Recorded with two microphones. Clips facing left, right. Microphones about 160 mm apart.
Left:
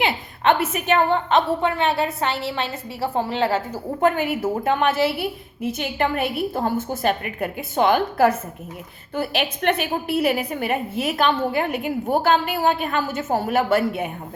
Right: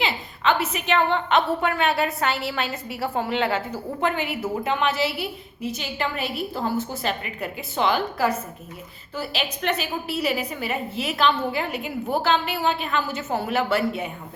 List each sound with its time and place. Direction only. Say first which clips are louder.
0.0 s a woman's voice: left 4 dB; 55° left (ahead or behind); by 3.6 s 35° left (ahead or behind)
4.0 s a woman's voice: left 6 dB; 45° left (ahead or behind)